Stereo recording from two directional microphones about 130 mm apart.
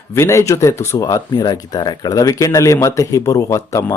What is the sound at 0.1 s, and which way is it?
Speech, 20° left (ahead or behind).